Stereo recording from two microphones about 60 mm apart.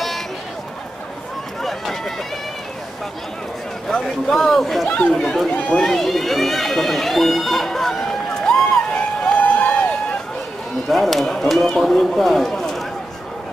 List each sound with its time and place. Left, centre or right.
1.6 s run: centre
4.3 s speech: centre
4.8 s speech: left
5.1 s speech: centre
5.5 s speech: left
5.8 s speech: centre
8.9 s a sound: left
10.9 s speech: centre